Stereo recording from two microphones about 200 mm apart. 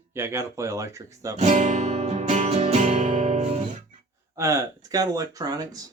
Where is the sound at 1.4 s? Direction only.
35° right (ahead or behind).